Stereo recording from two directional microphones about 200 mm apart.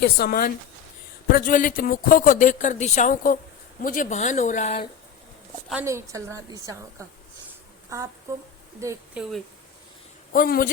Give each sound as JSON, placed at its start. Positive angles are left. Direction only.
{"t": 0.0, "sound": "a woman's voice", "side_deg": 50}
{"t": 5.8, "sound": "a woman's voice", "side_deg": -15}
{"t": 8.3, "sound": "a woman's voice", "side_deg": -15}
{"t": 10.3, "sound": "a woman's voice", "side_deg": 45}